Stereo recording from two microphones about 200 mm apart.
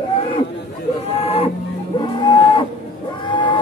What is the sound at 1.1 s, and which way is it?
Music, 30° left (ahead or behind).